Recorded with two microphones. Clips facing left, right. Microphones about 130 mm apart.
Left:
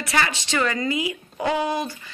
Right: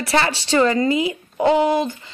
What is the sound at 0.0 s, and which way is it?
Speech, 30° right (ahead or behind).